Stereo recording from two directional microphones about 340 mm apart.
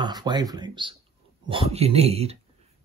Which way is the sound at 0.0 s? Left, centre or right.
Centre.